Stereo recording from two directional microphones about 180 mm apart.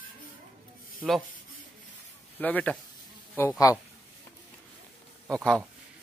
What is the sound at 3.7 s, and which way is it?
Speech, 20° left (ahead or behind).